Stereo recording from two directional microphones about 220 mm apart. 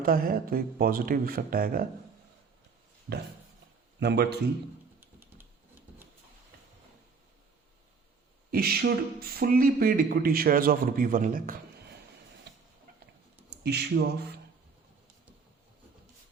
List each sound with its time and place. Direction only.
0.0 s speech: 40° right (ahead or behind)
4.0 s a man's voice: 50° right (ahead or behind)
4.9 s typing: 10° right (ahead or behind)
8.4 s speech: 45° right (ahead or behind)
12.5 s tick-tock: 50° right (ahead or behind)
13.5 s speech: 50° right (ahead or behind)